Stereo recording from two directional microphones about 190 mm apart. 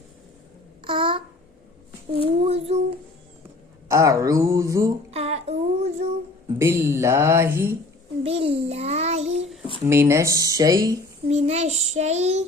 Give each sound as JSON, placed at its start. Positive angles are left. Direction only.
{"t": 0.9, "sound": "a sound", "side_deg": -25}
{"t": 2.1, "sound": "child singing", "side_deg": -30}
{"t": 3.8, "sound": "speech", "side_deg": -15}
{"t": 5.1, "sound": "child singing", "side_deg": -35}
{"t": 6.6, "sound": "speech", "side_deg": -15}
{"t": 8.2, "sound": "child singing", "side_deg": -30}
{"t": 9.8, "sound": "speech", "side_deg": -15}
{"t": 11.3, "sound": "child singing", "side_deg": -35}